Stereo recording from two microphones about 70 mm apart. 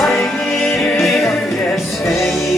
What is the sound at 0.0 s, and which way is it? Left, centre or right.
Music, centre.